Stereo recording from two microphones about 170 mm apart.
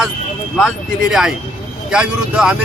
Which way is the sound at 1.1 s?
5° right (ahead or behind).